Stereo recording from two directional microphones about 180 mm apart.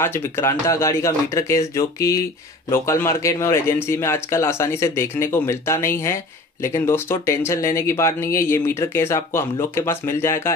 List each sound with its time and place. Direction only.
0.0 s speech: 15° left (ahead or behind)